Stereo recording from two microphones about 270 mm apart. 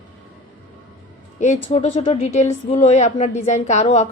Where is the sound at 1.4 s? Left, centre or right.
Left.